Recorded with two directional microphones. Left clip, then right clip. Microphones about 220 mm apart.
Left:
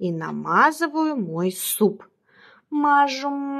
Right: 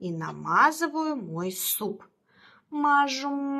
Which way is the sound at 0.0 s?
40° left (ahead or behind).